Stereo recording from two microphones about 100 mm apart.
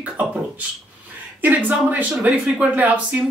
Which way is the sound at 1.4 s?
15° right (ahead or behind).